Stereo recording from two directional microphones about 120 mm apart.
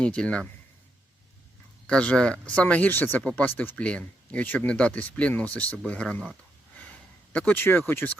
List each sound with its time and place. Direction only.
0.0 s speech: 10° left (ahead or behind)
1.9 s speech: 5° left (ahead or behind)
7.3 s speech: 15° left (ahead or behind)